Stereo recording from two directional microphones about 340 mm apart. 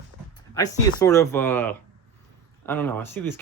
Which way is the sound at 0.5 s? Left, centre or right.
Centre.